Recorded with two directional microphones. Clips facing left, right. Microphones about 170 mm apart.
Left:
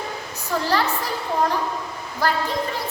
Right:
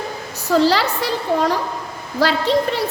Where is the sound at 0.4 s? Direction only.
90° right.